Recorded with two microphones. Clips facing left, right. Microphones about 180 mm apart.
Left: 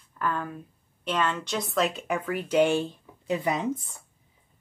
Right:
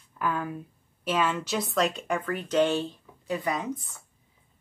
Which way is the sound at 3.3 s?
25° left (ahead or behind).